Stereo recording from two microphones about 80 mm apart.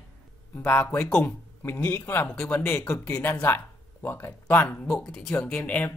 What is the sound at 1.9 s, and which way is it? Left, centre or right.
Speech, left.